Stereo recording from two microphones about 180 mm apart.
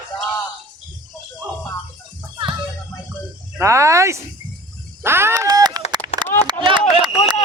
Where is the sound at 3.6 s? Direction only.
15° right (ahead or behind).